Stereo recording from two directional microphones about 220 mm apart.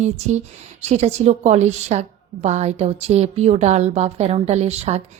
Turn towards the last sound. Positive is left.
turn(degrees=-30)  # may be behind; listen again after turning